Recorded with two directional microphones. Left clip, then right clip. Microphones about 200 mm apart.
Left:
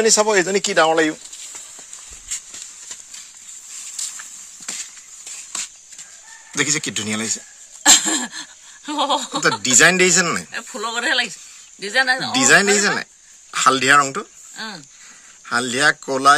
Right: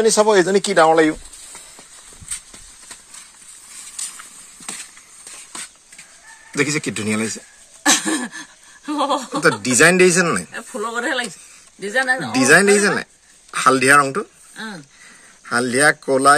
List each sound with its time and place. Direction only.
0.0 s speech: 5° left (ahead or behind)
6.5 s speech: centre (ahead or behind)
7.8 s a sound: 20° left (ahead or behind)
9.6 s speech: centre (ahead or behind)
10.5 s speech: 20° left (ahead or behind)
12.4 s speech: centre (ahead or behind)
14.5 s speech: 20° left (ahead or behind)
15.4 s speech: centre (ahead or behind)